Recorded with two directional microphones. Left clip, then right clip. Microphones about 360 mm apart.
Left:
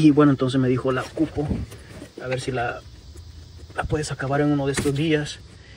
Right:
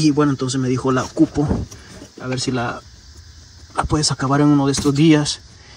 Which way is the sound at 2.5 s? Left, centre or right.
Right.